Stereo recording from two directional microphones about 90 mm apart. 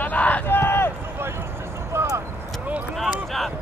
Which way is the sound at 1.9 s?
30° right (ahead or behind).